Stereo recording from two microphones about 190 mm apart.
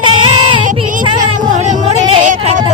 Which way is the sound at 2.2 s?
40° right (ahead or behind).